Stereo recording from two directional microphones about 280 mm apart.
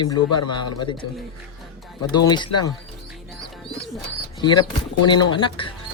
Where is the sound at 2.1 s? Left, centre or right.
Centre.